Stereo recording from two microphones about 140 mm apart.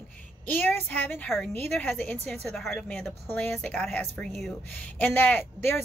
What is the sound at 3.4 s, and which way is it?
Speech, 15° left (ahead or behind).